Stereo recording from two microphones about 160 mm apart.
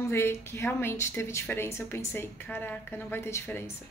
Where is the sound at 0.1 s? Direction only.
15° left (ahead or behind).